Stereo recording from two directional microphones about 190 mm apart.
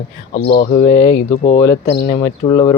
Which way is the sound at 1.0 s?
30° left (ahead or behind).